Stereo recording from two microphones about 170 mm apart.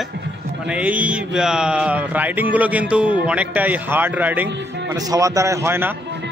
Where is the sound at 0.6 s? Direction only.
5° right (ahead or behind).